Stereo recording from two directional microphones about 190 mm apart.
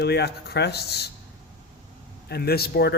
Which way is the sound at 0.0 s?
60° left (ahead or behind).